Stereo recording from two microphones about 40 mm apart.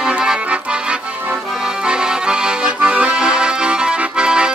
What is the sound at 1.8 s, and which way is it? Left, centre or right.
Accordion, right.